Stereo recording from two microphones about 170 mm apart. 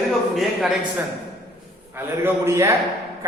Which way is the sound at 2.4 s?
15° right (ahead or behind).